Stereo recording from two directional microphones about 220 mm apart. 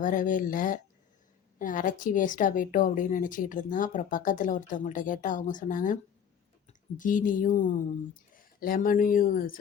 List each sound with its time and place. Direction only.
0.0 s a woman's voice: 35° left (ahead or behind)